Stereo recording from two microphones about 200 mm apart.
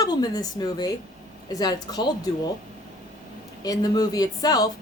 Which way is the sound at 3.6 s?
20° left (ahead or behind).